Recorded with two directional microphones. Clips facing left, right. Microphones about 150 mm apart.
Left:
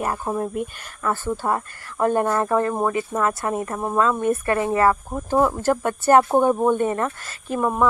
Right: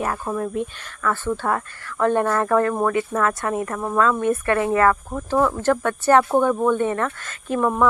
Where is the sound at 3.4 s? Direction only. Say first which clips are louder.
Right 1 dB; 30° left (ahead or behind).